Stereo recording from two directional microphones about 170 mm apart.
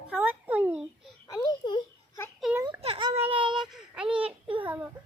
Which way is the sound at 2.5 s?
15° right (ahead or behind).